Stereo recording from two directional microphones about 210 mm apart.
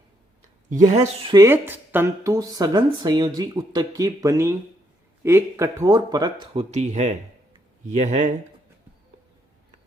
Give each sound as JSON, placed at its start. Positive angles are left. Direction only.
{"t": 1.3, "sound": "speech", "side_deg": -15}
{"t": 6.4, "sound": "speech", "side_deg": -30}